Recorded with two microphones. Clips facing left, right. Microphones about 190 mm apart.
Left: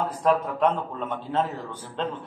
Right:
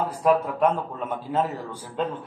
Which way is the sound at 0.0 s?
10° right (ahead or behind).